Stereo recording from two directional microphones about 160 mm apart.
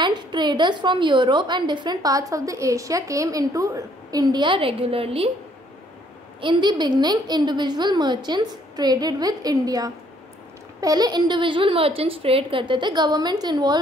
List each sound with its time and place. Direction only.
0.0 s a woman's voice: 30° right (ahead or behind)
6.4 s a woman's voice: 30° right (ahead or behind)